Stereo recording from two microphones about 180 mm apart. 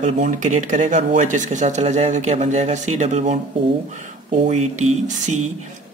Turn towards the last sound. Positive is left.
turn(degrees=-40)  # may be behind; listen again after turning